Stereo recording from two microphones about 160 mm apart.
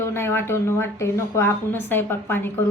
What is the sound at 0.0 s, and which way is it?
Speech, 15° left (ahead or behind).